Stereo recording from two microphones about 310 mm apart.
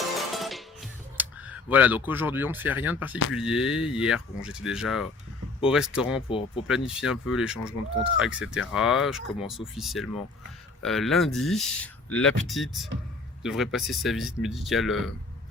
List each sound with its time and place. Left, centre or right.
0.3 s music: centre
3.3 s speech: centre
6.2 s speech: centre
6.7 s speech: centre